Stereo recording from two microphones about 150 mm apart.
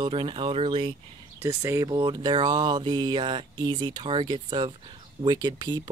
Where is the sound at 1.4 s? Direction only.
20° right (ahead or behind).